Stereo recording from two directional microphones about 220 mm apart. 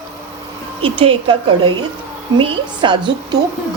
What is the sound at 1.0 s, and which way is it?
Speech, 25° right (ahead or behind).